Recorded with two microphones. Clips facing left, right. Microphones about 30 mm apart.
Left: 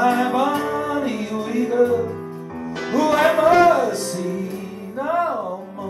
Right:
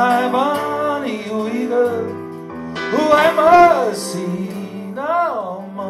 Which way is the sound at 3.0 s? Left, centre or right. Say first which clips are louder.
Right 3 dB; right.